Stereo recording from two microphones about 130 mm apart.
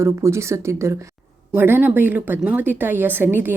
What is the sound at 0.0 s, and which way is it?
Speech, 20° right (ahead or behind).